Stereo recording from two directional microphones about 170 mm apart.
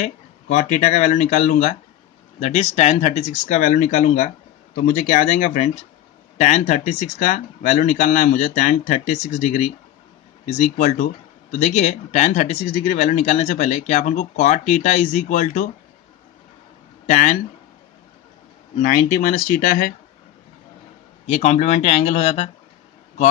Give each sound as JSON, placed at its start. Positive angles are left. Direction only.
{"t": 0.0, "sound": "speech", "side_deg": 45}
{"t": 17.1, "sound": "speech", "side_deg": 50}
{"t": 18.8, "sound": "speech", "side_deg": 55}
{"t": 21.3, "sound": "speech", "side_deg": 40}